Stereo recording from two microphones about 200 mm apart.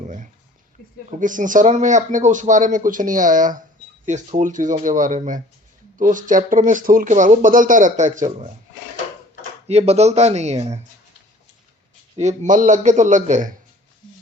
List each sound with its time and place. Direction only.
0.0 s a sound: 40° right (ahead or behind)
1.2 s speech: 40° right (ahead or behind)
9.6 s speech: 30° right (ahead or behind)
12.1 s speech: 35° right (ahead or behind)